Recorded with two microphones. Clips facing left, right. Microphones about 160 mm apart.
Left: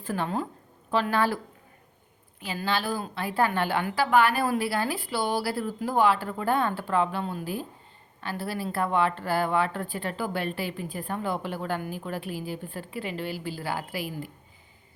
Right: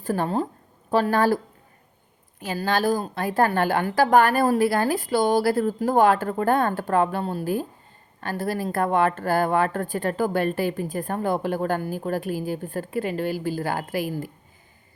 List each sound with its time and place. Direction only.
0.0 s a woman's voice: 40° right (ahead or behind)
2.4 s speech: 45° right (ahead or behind)